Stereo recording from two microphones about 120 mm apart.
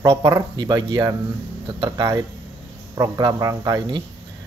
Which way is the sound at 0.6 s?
35° right (ahead or behind).